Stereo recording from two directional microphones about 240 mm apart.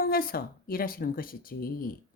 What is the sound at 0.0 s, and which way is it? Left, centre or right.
Speech, left.